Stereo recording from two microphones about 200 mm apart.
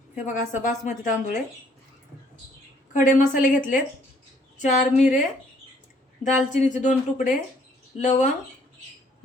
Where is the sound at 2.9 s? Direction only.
40° left (ahead or behind).